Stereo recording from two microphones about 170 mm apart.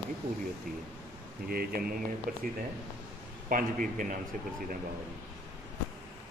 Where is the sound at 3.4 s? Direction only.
55° right (ahead or behind).